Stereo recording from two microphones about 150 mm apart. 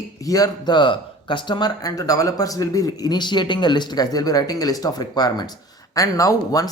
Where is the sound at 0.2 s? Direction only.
25° left (ahead or behind).